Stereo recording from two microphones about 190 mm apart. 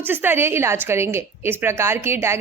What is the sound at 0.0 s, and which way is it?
A woman's voice, 10° right (ahead or behind).